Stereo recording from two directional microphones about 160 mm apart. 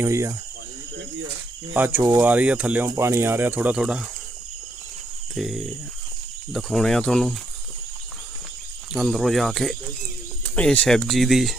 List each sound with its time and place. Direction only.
0.0 s speech: 20° right (ahead or behind)
1.7 s speech: 10° right (ahead or behind)
5.3 s speech: centre (ahead or behind)
8.9 s speech: centre (ahead or behind)